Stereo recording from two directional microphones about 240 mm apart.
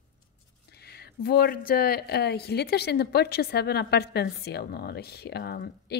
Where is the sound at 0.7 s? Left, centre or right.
Left.